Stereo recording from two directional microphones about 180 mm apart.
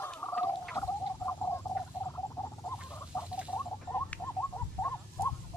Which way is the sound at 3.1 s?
15° left (ahead or behind).